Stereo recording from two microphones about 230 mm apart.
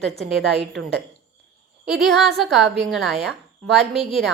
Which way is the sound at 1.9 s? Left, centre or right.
Centre.